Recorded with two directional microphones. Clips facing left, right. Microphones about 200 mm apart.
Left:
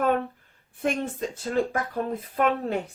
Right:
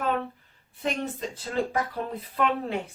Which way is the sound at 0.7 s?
50° left (ahead or behind).